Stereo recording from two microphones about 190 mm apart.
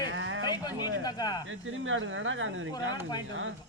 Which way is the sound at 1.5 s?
90° right.